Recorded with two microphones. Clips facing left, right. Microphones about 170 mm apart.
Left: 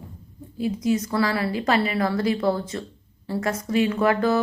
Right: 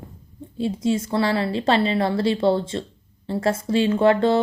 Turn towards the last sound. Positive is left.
turn(degrees=-25)  # may be behind; listen again after turning